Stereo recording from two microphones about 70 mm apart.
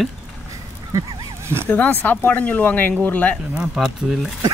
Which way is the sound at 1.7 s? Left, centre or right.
Left.